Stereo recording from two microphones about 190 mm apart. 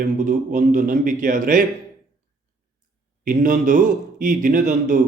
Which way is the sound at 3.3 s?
45° right (ahead or behind).